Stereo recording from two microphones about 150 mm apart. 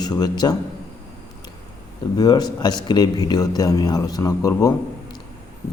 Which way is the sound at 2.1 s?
25° left (ahead or behind).